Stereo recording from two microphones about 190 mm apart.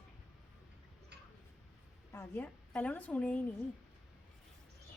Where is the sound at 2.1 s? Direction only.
10° left (ahead or behind).